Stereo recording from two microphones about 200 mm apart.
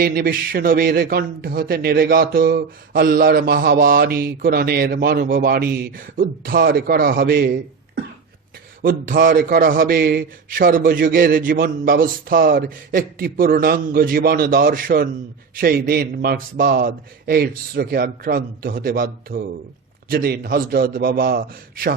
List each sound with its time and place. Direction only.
0.0 s a man's voice: 50° right (ahead or behind)
8.8 s a man's voice: 45° right (ahead or behind)